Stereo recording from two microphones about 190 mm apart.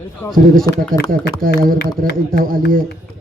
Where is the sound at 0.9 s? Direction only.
50° right (ahead or behind).